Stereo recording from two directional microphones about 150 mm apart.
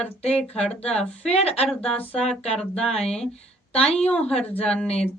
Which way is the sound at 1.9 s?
10° left (ahead or behind).